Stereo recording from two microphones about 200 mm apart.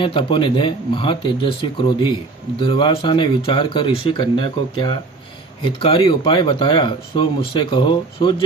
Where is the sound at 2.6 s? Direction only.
25° left (ahead or behind).